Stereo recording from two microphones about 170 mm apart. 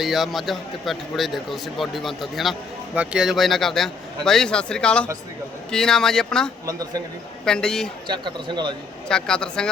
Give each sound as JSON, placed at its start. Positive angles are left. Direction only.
{"t": 0.0, "sound": "a man's voice", "side_deg": 0}
{"t": 6.7, "sound": "speech", "side_deg": -20}
{"t": 7.4, "sound": "a man's voice", "side_deg": 5}
{"t": 8.0, "sound": "speech", "side_deg": -25}
{"t": 9.0, "sound": "a man's voice", "side_deg": 5}